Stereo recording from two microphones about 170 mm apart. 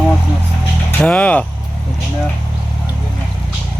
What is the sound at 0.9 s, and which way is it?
Speech, 5° left (ahead or behind).